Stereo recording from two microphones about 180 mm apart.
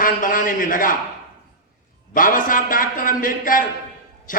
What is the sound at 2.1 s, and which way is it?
A man's voice, 50° left (ahead or behind).